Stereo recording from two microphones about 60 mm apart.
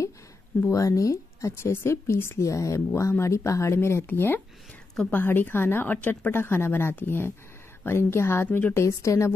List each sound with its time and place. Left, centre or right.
0.7 s speech: left
1.5 s speech: left
2.4 s speech: left
4.0 s a woman's voice: left
8.5 s a woman's voice: left
8.7 s speech: left